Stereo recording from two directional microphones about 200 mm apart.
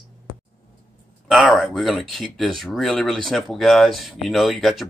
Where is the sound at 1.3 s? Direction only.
Centre (ahead or behind).